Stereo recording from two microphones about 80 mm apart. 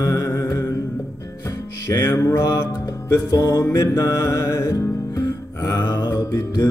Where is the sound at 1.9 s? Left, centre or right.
Left.